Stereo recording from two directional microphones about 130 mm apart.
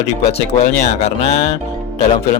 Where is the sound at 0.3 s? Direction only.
60° left (ahead or behind).